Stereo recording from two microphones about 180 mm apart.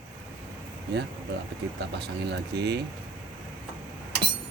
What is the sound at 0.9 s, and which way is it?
Speech, 70° right (ahead or behind).